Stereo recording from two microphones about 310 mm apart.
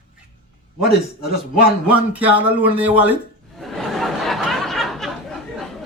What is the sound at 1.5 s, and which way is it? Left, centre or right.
A man's voice, centre.